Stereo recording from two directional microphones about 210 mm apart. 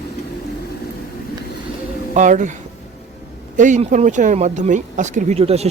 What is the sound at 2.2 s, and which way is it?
Speech, 35° right (ahead or behind).